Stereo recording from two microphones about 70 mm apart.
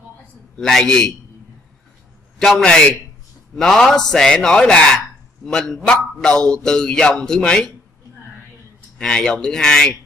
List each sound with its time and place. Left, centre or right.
0.6 s a man's voice: centre
2.3 s a man's voice: centre
8.9 s a man's voice: centre